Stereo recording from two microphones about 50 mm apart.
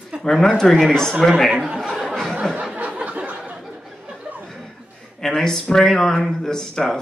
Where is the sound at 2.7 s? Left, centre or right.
Right.